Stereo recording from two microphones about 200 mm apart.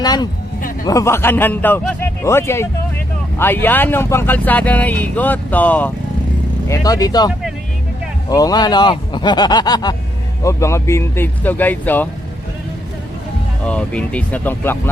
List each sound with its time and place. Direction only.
0.0 s speech: 20° left (ahead or behind)
8.3 s speech: 20° left (ahead or behind)
13.7 s speech: 5° left (ahead or behind)